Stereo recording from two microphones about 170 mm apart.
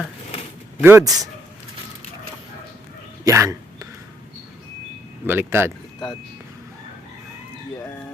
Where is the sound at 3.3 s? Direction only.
20° right (ahead or behind).